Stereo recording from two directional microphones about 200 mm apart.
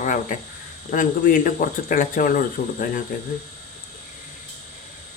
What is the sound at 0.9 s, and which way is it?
Speech, 40° left (ahead or behind).